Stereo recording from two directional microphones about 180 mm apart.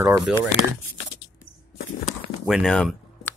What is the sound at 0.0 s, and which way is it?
Speech, centre (ahead or behind).